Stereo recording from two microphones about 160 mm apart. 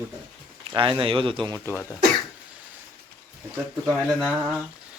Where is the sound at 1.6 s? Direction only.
15° left (ahead or behind).